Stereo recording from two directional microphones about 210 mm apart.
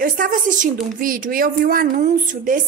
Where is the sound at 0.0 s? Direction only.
40° right (ahead or behind).